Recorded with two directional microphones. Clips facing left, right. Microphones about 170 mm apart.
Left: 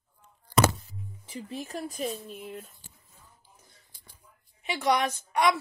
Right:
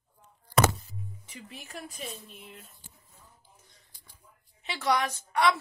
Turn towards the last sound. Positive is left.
turn(degrees=15)  # may be behind; listen again after turning